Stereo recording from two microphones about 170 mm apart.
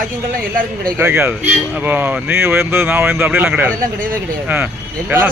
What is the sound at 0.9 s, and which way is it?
Speech, 15° right (ahead or behind).